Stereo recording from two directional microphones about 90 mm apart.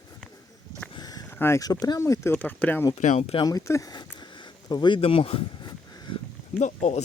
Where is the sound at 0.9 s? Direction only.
45° left (ahead or behind).